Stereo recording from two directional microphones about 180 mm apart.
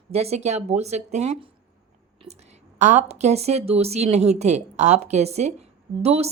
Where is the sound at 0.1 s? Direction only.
35° right (ahead or behind).